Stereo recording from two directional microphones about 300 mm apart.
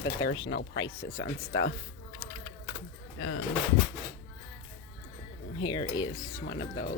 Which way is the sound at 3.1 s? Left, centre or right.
Left.